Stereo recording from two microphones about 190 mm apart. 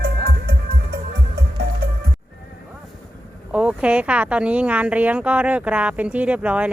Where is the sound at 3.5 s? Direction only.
5° right (ahead or behind).